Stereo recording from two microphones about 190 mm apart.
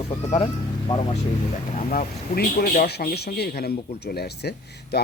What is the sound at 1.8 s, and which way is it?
Speech, 45° left (ahead or behind).